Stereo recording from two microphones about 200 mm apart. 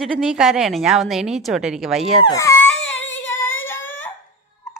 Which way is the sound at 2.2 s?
15° left (ahead or behind).